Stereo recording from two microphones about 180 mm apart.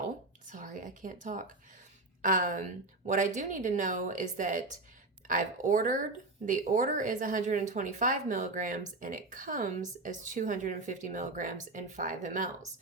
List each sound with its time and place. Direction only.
0.4 s speech: 45° right (ahead or behind)